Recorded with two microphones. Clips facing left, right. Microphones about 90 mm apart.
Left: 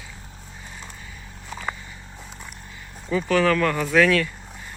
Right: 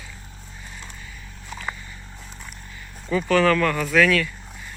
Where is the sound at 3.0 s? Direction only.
10° left (ahead or behind); by 4.2 s 25° left (ahead or behind).